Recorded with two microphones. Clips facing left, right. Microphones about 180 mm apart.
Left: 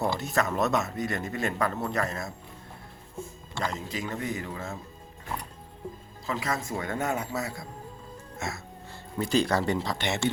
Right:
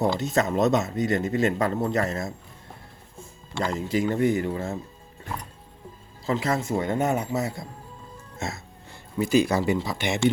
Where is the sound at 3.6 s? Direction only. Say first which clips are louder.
Right 7 dB; 30° right (ahead or behind).